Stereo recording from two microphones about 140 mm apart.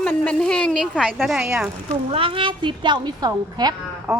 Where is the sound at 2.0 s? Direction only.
40° right (ahead or behind).